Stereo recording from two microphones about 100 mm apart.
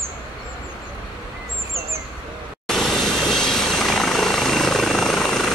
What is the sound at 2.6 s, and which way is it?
Vehicle, 5° left (ahead or behind).